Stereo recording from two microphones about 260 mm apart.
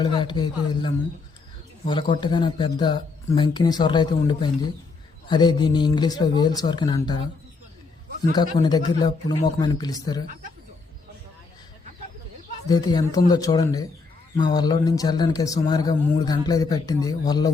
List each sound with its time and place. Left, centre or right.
0.0 s a man's voice: centre
8.6 s a man's voice: centre
12.6 s a man's voice: centre